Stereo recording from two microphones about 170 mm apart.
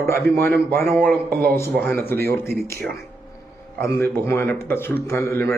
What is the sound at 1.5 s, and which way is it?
Speech, 15° left (ahead or behind).